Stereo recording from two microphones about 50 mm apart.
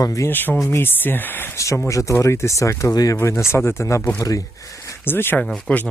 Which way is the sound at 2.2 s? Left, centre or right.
Left.